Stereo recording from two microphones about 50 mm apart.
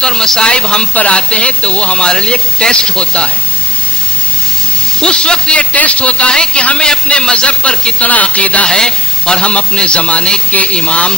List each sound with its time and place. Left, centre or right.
0.0 s speech: centre
4.9 s speech: centre